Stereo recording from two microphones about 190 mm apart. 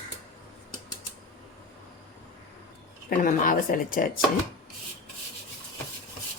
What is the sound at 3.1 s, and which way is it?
Speech, 45° left (ahead or behind).